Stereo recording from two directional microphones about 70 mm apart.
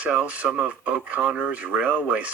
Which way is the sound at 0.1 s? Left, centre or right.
Centre.